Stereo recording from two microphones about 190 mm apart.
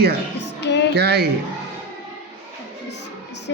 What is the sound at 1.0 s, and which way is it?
Speech, 60° right (ahead or behind).